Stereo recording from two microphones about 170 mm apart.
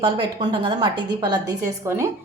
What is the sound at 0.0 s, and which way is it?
A woman's voice, 30° right (ahead or behind).